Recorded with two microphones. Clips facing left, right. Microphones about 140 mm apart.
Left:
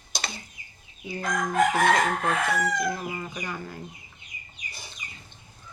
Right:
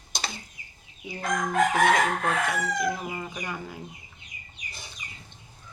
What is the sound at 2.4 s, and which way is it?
Speech, 15° right (ahead or behind).